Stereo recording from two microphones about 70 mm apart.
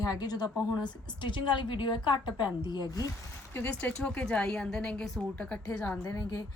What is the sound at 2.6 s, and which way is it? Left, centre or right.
Speech, left.